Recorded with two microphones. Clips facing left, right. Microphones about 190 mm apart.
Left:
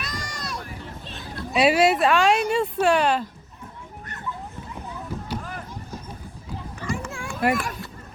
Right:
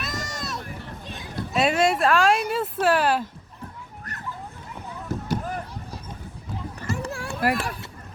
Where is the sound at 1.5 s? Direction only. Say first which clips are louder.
Left 3 dB; 5° left (ahead or behind).